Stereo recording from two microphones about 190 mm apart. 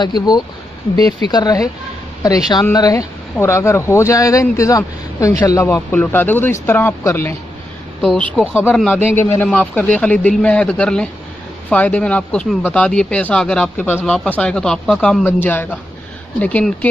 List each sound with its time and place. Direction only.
0.0 s speech: 20° left (ahead or behind)
8.0 s speech: centre (ahead or behind)